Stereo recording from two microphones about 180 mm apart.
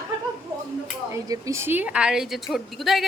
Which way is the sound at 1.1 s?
15° right (ahead or behind).